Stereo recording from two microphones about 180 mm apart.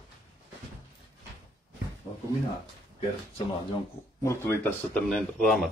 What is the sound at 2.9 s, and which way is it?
Speech, 30° left (ahead or behind).